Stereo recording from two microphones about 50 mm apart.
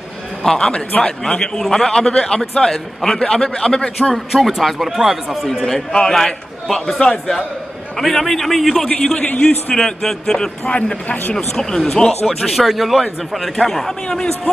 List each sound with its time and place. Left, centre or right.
0.4 s a man's voice: centre
4.1 s speech: centre
5.5 s a man's voice: centre
9.2 s a man's voice: left
9.8 s a man's voice: centre